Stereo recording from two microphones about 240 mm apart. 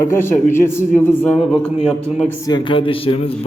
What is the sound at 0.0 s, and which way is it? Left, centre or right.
A man's voice, centre.